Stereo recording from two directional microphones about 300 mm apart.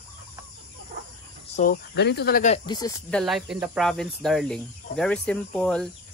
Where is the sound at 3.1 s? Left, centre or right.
Centre.